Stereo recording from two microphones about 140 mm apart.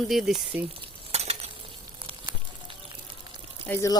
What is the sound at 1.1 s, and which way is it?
Stir, 45° right (ahead or behind).